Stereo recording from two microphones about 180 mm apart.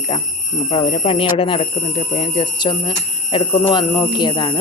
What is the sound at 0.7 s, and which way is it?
Speech, 30° left (ahead or behind).